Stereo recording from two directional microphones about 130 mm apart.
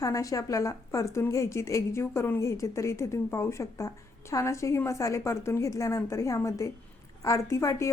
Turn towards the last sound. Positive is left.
turn(degrees=25)  # may be behind; listen again after turning